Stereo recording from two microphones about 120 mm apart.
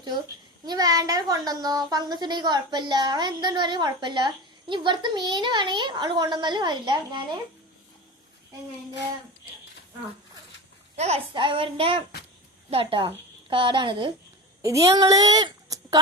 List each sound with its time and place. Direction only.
0.6 s a child's voice: 35° right (ahead or behind)
10.9 s a child's voice: 65° right (ahead or behind)
11.3 s a woman's voice: 45° right (ahead or behind)
14.6 s speech: 25° right (ahead or behind)